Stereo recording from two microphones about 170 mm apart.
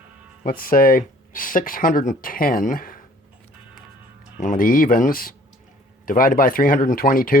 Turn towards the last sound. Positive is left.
turn(degrees=55)  # may be behind; listen again after turning